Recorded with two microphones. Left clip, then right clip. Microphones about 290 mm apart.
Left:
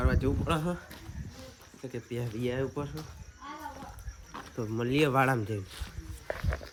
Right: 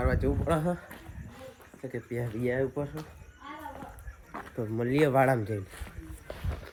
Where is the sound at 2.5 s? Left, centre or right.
Centre.